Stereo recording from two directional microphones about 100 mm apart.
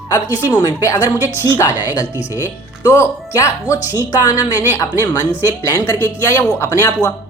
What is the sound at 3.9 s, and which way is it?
A woman's voice, 40° left (ahead or behind).